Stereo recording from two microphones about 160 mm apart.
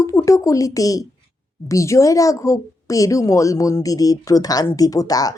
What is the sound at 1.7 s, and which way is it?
Speech, 20° left (ahead or behind).